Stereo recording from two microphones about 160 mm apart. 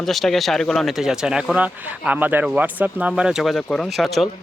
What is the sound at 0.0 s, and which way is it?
Speech, centre (ahead or behind).